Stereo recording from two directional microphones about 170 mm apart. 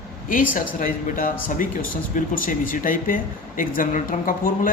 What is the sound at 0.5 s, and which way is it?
Speech, 55° left (ahead or behind).